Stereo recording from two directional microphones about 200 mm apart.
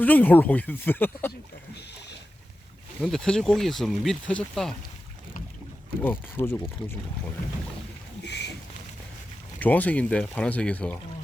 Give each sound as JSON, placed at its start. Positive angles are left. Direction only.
{"t": 0.0, "sound": "speech", "side_deg": 10}
{"t": 3.0, "sound": "speech", "side_deg": 5}
{"t": 6.0, "sound": "speech", "side_deg": 10}
{"t": 8.2, "sound": "boat", "side_deg": 60}
{"t": 9.6, "sound": "speech", "side_deg": 10}